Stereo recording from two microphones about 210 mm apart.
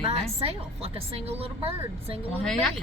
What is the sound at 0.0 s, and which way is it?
A woman's voice, 30° right (ahead or behind).